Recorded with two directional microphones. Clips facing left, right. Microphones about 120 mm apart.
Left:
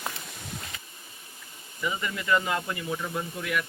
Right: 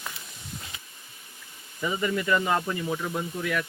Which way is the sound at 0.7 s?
15° right (ahead or behind).